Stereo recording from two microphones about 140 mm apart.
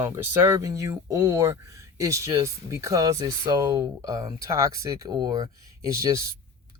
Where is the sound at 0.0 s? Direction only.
15° right (ahead or behind).